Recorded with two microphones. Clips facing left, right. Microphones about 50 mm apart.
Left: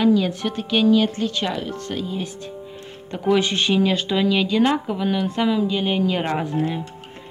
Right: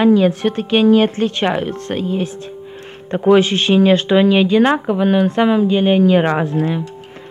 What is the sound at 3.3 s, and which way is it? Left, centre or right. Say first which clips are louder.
Speech: right 7 dB; right.